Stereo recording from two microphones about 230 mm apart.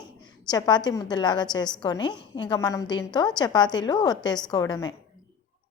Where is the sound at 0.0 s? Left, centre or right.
Centre.